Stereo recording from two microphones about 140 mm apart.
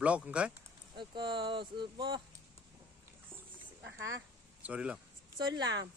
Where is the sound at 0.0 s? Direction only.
10° right (ahead or behind).